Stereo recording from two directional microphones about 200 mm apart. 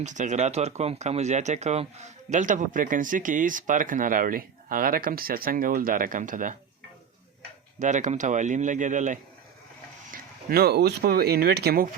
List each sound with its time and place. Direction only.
0.0 s speech: 35° right (ahead or behind)
7.8 s speech: 40° right (ahead or behind)
10.1 s speech: 50° right (ahead or behind)